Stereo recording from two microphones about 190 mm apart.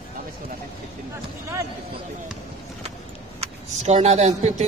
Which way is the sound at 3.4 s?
35° right (ahead or behind).